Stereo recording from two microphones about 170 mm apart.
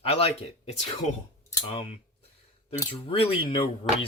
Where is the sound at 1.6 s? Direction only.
35° left (ahead or behind).